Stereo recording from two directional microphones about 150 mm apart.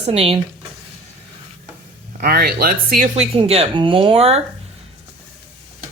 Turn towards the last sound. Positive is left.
turn(degrees=-40)  # may be behind; listen again after turning